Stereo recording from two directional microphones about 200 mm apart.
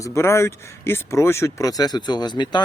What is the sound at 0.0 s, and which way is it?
Speech, 15° left (ahead or behind).